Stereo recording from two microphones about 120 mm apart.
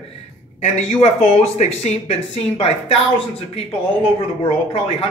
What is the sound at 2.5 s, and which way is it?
Speech, 55° left (ahead or behind).